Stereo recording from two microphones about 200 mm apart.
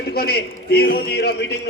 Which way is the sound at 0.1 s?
50° left (ahead or behind).